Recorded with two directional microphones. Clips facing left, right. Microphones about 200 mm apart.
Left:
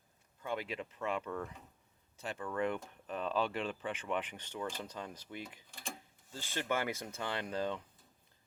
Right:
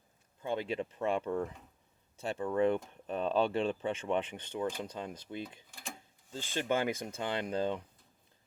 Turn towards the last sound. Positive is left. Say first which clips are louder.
# right 4 dB
turn(degrees=-20)  # may be behind; listen again after turning